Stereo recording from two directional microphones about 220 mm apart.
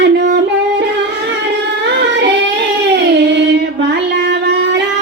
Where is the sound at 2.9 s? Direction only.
50° right (ahead or behind).